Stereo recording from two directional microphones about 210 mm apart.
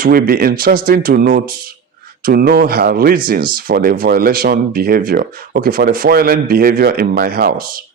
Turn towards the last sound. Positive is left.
turn(degrees=-45)  # may be behind; listen again after turning